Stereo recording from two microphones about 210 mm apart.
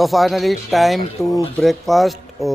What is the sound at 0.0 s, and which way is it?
Speech, centre (ahead or behind).